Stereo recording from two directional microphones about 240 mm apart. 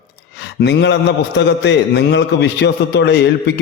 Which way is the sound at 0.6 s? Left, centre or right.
Left.